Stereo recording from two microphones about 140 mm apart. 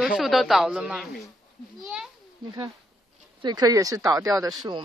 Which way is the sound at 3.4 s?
30° right (ahead or behind).